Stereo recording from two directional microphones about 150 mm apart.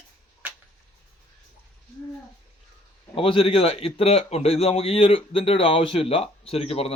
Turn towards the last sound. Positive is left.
turn(degrees=45)  # may be behind; listen again after turning